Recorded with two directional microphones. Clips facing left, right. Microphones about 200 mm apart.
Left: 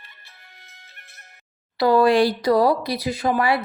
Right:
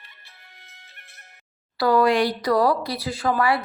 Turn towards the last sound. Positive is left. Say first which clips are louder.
# left 1 dB
turn(degrees=25)  # may be behind; listen again after turning